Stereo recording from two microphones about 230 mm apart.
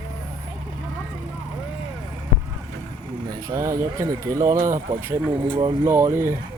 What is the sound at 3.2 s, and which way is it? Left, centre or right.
Speech, centre.